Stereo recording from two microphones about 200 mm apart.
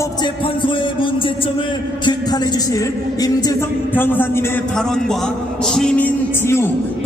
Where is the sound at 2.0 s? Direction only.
20° left (ahead or behind).